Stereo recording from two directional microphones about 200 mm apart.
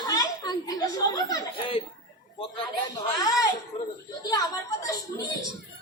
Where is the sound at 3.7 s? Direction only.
30° left (ahead or behind).